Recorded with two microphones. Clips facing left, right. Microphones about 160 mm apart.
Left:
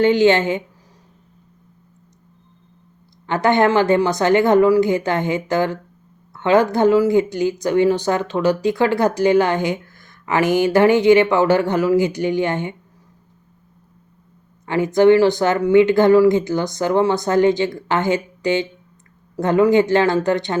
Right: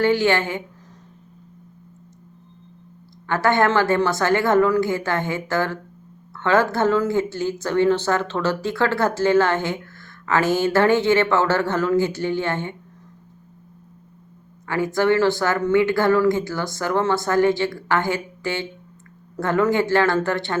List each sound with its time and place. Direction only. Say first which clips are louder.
0.0 s speech: left 5 dB; 20° left (ahead or behind)
3.2 s speech: left 3 dB; 20° left (ahead or behind)
14.7 s speech: left 6 dB; 20° left (ahead or behind)